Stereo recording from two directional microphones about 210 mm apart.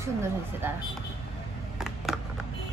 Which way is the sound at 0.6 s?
10° right (ahead or behind).